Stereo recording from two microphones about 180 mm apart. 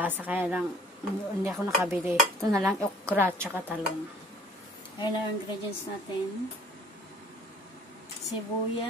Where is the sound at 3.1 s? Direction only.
10° right (ahead or behind).